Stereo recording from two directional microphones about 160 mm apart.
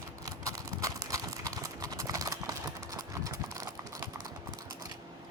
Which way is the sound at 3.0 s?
20° right (ahead or behind).